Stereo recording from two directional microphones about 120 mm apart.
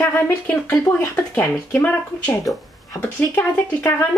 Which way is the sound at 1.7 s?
10° left (ahead or behind).